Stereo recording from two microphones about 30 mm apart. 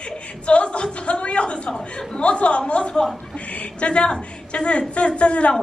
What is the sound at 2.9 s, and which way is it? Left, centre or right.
Speech, left.